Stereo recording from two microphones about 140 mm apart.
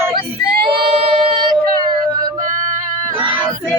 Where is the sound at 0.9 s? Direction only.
45° right (ahead or behind).